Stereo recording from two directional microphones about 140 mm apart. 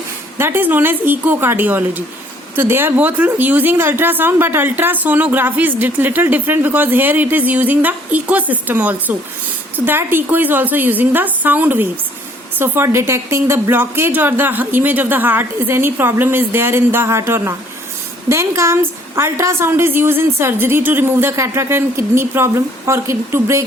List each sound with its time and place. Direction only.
0.3 s a woman's voice: 15° right (ahead or behind)